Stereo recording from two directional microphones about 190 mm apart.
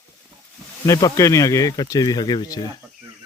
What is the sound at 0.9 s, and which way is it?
Speech, 20° left (ahead or behind).